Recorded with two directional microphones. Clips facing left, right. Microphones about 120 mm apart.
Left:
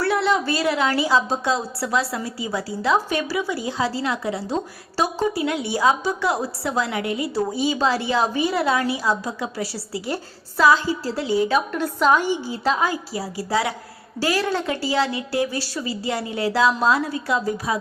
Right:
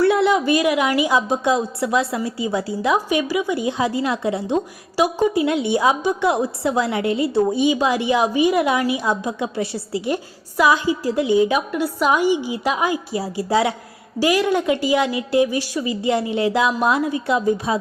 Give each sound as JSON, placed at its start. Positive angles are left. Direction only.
{"t": 0.0, "sound": "a woman's voice", "side_deg": -20}